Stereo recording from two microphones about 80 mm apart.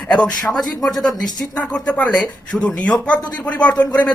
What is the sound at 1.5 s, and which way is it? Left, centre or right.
Speech, centre.